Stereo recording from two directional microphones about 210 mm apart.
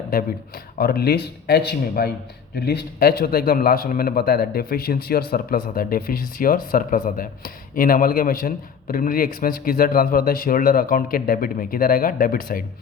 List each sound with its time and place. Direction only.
0.8 s a man's voice: 50° left (ahead or behind)